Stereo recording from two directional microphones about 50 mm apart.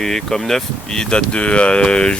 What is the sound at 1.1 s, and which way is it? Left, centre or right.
Speech, left.